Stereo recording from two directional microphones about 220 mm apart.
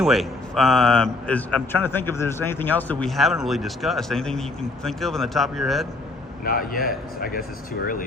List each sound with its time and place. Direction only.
0.0 s a man's voice: centre (ahead or behind)
6.4 s a man's voice: 40° left (ahead or behind)